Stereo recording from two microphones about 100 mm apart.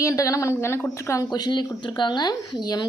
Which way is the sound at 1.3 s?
45° left (ahead or behind).